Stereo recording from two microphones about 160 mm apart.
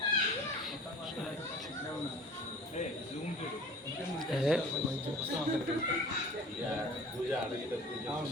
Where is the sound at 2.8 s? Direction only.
45° left (ahead or behind).